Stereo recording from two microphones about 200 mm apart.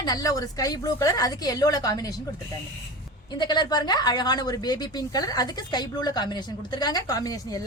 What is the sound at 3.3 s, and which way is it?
Speech, 20° left (ahead or behind).